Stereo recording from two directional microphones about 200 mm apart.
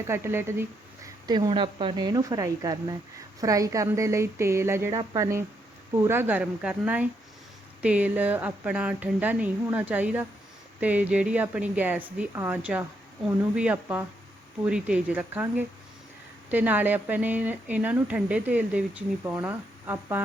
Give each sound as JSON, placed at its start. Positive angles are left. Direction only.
{"t": 0.1, "sound": "speech", "side_deg": -10}
{"t": 1.3, "sound": "speech", "side_deg": -25}